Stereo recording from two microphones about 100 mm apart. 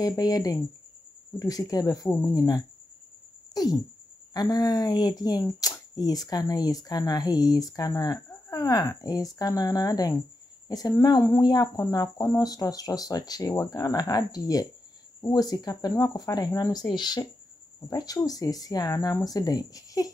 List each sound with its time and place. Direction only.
0.0 s speech: 40° left (ahead or behind)